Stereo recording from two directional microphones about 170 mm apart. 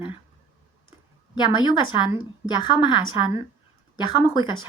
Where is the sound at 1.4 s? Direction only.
25° left (ahead or behind).